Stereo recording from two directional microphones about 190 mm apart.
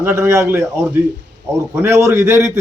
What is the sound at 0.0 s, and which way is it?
A man's voice, 15° right (ahead or behind).